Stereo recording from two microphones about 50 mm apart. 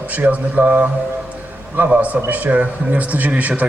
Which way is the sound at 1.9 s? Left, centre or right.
Right.